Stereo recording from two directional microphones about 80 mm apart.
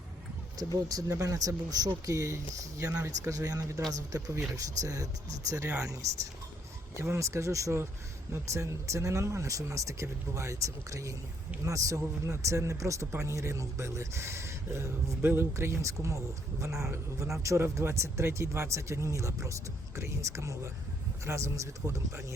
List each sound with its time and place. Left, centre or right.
0.9 s speech: right